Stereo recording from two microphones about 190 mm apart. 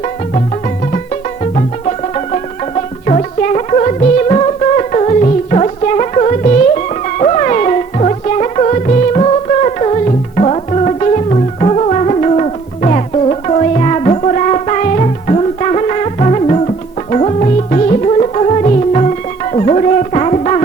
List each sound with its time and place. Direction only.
0.9 s music: 35° left (ahead or behind)